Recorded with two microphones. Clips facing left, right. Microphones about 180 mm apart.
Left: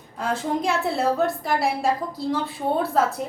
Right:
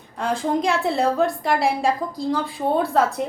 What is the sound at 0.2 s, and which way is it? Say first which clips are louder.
A woman's voice: right 3 dB; centre (ahead or behind).